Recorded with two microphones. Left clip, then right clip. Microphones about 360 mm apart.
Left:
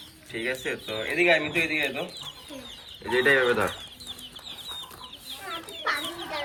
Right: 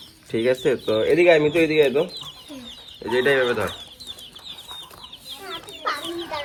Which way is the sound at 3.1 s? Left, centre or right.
Centre.